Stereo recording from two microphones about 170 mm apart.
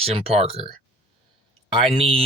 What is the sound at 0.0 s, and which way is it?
Speech, 35° right (ahead or behind).